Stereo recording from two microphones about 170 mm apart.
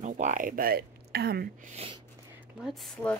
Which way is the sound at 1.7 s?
35° right (ahead or behind).